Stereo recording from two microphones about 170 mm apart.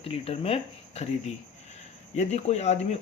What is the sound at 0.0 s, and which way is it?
Speech, 35° left (ahead or behind).